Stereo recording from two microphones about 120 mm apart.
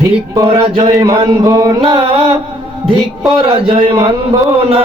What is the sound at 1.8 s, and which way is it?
Music, 45° right (ahead or behind).